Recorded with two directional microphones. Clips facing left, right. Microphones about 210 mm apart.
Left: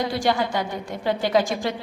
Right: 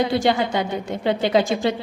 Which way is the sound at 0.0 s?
25° right (ahead or behind).